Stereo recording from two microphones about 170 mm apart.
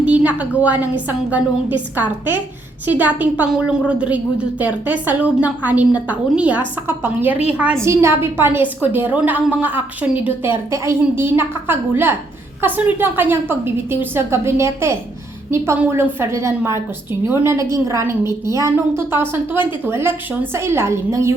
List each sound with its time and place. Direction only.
0.0 s a woman's voice: 10° right (ahead or behind)